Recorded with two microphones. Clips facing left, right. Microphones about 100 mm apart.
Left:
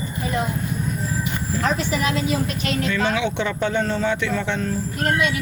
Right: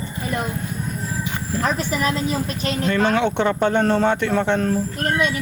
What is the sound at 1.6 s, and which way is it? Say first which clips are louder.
Speech: right 1 dB; 40° right (ahead or behind).